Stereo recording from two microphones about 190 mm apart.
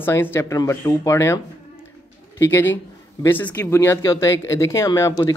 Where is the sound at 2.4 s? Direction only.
15° left (ahead or behind).